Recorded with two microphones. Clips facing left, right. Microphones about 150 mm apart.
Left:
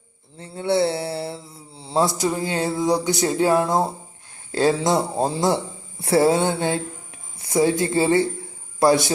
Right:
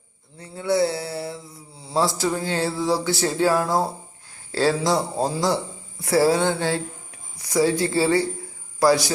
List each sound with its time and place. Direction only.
0.3 s mantra: 25° left (ahead or behind)
4.5 s speech: 20° left (ahead or behind)